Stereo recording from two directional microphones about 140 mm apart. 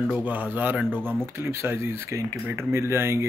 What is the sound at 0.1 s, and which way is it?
Speech, 10° right (ahead or behind).